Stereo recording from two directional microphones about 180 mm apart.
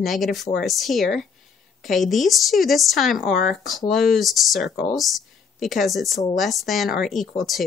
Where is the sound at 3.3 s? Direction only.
55° left (ahead or behind).